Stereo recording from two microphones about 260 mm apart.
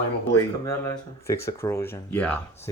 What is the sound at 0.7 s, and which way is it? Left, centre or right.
Speech, centre.